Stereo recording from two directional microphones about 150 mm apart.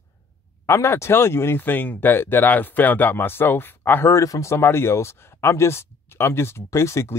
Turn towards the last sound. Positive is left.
turn(degrees=20)  # may be behind; listen again after turning